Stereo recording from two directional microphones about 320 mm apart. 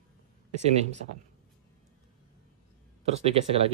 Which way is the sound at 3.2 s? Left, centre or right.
Centre.